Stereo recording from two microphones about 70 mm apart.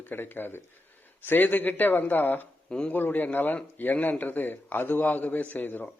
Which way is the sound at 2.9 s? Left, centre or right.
Left.